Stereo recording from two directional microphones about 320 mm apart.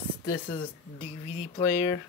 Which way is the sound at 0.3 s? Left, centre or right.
Centre.